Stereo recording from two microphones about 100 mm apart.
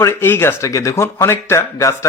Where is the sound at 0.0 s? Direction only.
25° left (ahead or behind).